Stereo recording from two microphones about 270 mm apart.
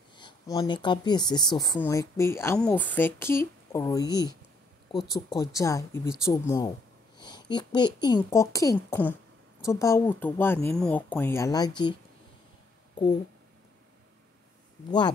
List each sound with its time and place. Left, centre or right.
0.1 s speech: centre
14.9 s speech: centre